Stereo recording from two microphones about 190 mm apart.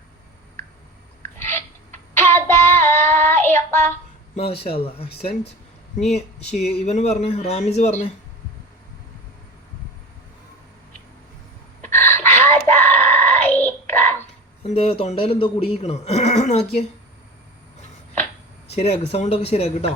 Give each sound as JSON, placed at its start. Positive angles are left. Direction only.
{"t": 1.4, "sound": "a sound", "side_deg": 10}
{"t": 2.1, "sound": "child singing", "side_deg": 15}
{"t": 4.4, "sound": "speech", "side_deg": 30}
{"t": 6.1, "sound": "speech", "side_deg": 35}
{"t": 11.8, "sound": "a sound", "side_deg": 10}
{"t": 14.6, "sound": "speech", "side_deg": 35}
{"t": 18.7, "sound": "speech", "side_deg": 35}